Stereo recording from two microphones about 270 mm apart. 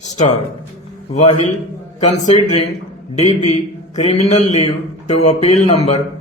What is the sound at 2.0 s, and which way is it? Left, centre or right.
Speech, left.